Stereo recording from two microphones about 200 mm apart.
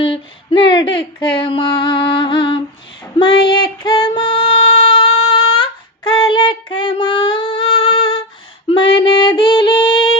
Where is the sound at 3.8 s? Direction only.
20° left (ahead or behind).